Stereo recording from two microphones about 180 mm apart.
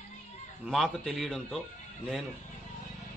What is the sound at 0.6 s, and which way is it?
Speech, centre (ahead or behind).